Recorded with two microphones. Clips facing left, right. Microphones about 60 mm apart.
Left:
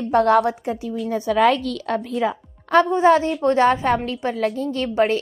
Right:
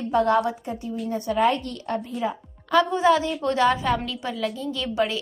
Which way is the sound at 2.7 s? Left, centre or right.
Left.